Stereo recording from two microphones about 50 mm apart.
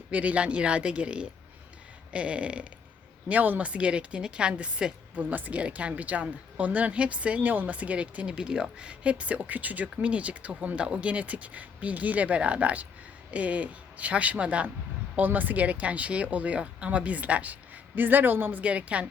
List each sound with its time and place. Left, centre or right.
0.1 s a woman's voice: right
3.2 s speech: right
3.7 s a woman's voice: right
5.3 s a woman's voice: right
15.1 s a woman's voice: right
18.6 s a woman's voice: right